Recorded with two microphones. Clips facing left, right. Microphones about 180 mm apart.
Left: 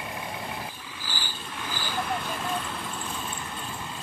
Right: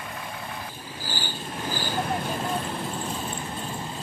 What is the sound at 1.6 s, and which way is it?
Vehicle, 40° right (ahead or behind).